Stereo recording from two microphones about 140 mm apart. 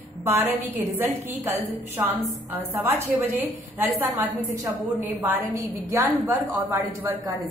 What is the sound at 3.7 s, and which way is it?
A woman's voice, 10° right (ahead or behind).